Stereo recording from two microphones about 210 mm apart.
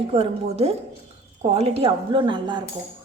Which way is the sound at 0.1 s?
30° right (ahead or behind).